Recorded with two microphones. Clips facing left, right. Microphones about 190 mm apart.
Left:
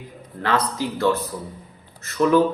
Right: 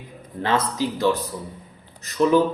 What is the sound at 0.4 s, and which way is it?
Speech, 20° right (ahead or behind).